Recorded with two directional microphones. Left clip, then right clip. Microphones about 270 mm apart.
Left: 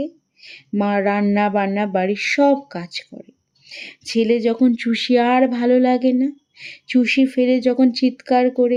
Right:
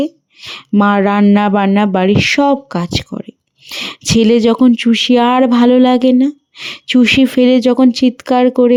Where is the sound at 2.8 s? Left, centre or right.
Right.